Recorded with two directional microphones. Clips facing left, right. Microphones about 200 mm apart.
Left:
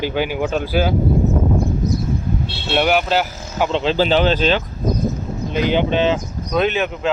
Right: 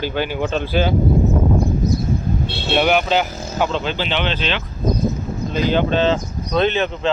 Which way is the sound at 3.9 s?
40° left (ahead or behind).